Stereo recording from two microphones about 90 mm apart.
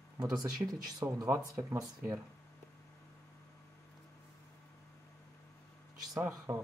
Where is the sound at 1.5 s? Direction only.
35° right (ahead or behind).